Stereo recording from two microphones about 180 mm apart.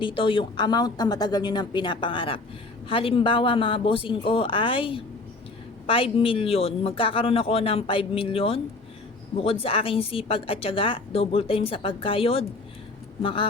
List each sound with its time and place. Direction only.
0.0 s a woman's voice: 30° left (ahead or behind)